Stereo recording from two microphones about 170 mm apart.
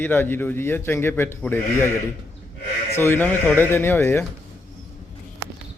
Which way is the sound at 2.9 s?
15° left (ahead or behind).